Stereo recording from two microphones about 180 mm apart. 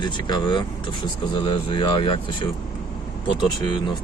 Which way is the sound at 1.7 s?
25° left (ahead or behind).